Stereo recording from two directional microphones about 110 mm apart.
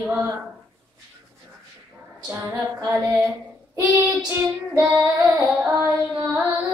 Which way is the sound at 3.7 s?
25° right (ahead or behind).